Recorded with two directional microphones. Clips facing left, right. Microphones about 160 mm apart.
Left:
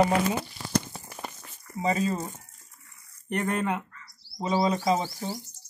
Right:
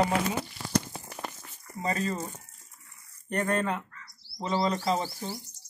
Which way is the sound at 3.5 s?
10° left (ahead or behind).